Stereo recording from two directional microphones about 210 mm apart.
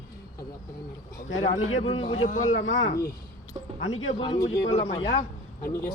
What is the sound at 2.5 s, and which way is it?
Speech, 65° left (ahead or behind).